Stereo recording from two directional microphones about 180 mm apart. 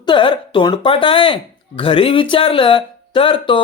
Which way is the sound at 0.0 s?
25° left (ahead or behind).